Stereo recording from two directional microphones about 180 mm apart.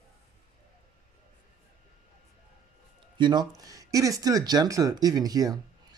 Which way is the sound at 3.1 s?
25° right (ahead or behind).